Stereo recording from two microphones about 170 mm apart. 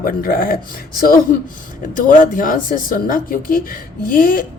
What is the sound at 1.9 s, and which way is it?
A woman's voice, 50° left (ahead or behind).